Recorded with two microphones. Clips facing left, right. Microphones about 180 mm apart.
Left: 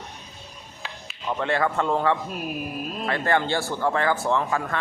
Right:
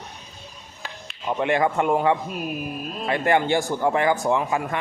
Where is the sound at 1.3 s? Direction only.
15° right (ahead or behind).